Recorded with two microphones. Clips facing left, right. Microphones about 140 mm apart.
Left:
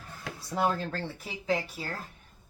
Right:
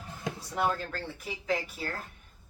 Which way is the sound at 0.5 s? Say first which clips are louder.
Left 2 dB; 25° left (ahead or behind).